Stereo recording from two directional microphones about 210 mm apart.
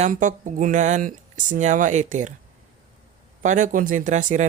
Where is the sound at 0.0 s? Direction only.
35° right (ahead or behind).